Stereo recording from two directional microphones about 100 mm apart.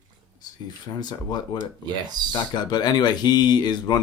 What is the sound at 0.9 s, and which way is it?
Speech, 45° left (ahead or behind).